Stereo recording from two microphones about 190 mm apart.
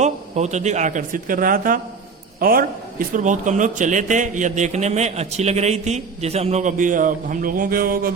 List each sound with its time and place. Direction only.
0.0 s a man's voice: 35° right (ahead or behind)